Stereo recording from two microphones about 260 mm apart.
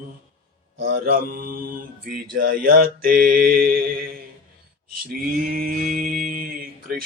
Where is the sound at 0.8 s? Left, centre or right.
Right.